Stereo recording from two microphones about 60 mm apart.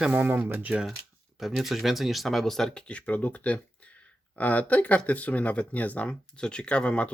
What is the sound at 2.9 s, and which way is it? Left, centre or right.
Speech, left.